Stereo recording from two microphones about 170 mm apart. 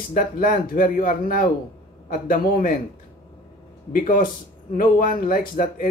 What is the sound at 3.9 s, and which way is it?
Speech, 55° left (ahead or behind).